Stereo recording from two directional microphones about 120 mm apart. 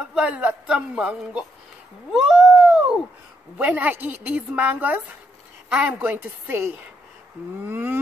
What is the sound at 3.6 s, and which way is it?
Speech, 15° right (ahead or behind).